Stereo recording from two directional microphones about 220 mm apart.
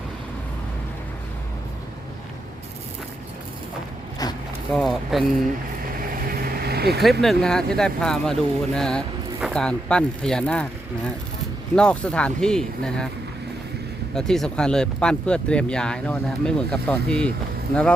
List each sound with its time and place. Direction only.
4.2 s zipper: 15° left (ahead or behind)
4.7 s a sound: centre (ahead or behind)
6.0 s vehicle: 40° right (ahead or behind)
7.0 s speech: centre (ahead or behind)
14.2 s speech: centre (ahead or behind)